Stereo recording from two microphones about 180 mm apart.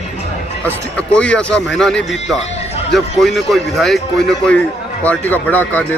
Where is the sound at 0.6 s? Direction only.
5° left (ahead or behind).